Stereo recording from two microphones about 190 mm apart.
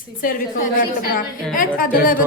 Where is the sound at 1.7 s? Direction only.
45° left (ahead or behind).